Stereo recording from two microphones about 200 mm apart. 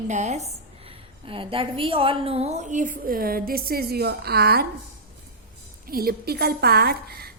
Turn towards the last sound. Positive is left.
turn(degrees=-50)  # may be behind; listen again after turning